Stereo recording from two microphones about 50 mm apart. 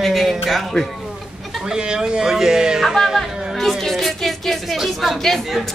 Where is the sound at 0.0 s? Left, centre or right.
Centre.